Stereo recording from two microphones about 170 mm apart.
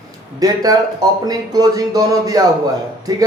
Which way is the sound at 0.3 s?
20° right (ahead or behind).